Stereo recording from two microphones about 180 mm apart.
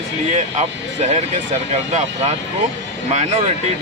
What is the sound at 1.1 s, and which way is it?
Speech, 40° right (ahead or behind).